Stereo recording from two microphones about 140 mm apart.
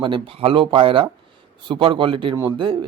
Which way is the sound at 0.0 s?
40° right (ahead or behind).